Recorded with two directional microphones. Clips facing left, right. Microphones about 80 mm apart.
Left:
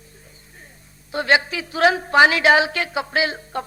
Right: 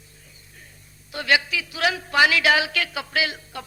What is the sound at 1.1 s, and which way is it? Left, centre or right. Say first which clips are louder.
A man's voice: left 4 dB; left.